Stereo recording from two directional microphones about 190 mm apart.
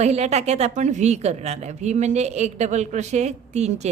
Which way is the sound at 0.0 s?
35° right (ahead or behind).